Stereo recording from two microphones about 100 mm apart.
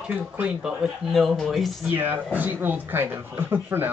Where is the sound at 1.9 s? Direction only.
20° right (ahead or behind).